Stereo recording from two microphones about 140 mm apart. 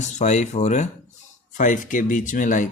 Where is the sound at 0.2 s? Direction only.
55° left (ahead or behind).